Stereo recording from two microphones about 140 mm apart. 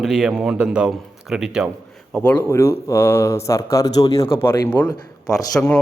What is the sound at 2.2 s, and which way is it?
Speech, 15° left (ahead or behind).